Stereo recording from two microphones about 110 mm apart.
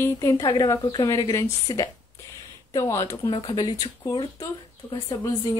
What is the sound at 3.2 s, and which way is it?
Speech, 40° left (ahead or behind).